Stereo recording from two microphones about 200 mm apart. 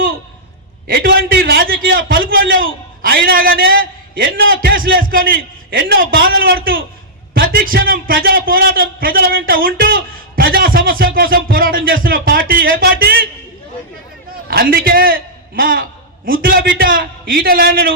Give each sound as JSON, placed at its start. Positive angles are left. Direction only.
{"t": 0.9, "sound": "a man's voice", "side_deg": -50}
{"t": 14.4, "sound": "a man's voice", "side_deg": -50}